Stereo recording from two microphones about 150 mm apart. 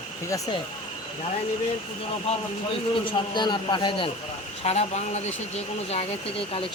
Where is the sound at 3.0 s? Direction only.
30° left (ahead or behind).